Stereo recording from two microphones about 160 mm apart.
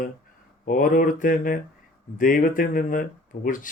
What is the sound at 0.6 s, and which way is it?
Speech, 55° left (ahead or behind).